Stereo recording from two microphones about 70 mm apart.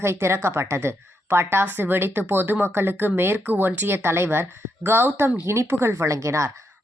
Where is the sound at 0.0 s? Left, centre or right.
Right.